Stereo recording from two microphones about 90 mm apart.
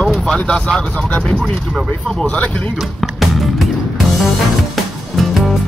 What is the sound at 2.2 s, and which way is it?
Speech, 15° left (ahead or behind).